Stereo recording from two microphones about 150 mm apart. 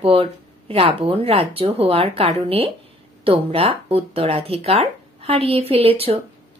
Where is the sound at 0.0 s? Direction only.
40° right (ahead or behind).